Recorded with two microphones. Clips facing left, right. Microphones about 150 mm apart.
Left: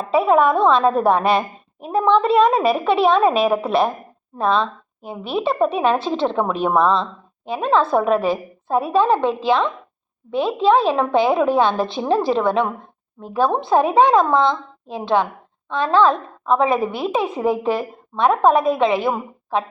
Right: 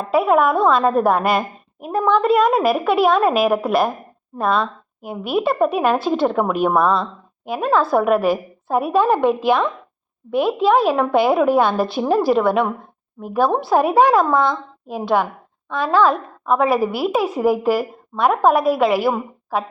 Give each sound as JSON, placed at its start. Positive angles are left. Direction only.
{"t": 0.0, "sound": "a woman's voice", "side_deg": -5}
{"t": 2.0, "sound": "a woman's voice", "side_deg": 25}
{"t": 2.6, "sound": "a woman's voice", "side_deg": -5}
{"t": 7.7, "sound": "a woman's voice", "side_deg": 20}
{"t": 7.9, "sound": "a woman's voice", "side_deg": -10}
{"t": 14.3, "sound": "a woman's voice", "side_deg": 20}
{"t": 14.8, "sound": "a woman's voice", "side_deg": -10}